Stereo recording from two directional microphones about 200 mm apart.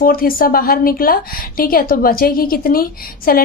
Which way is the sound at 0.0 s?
45° left (ahead or behind).